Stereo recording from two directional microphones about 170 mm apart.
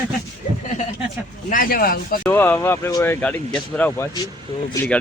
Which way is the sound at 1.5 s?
55° left (ahead or behind).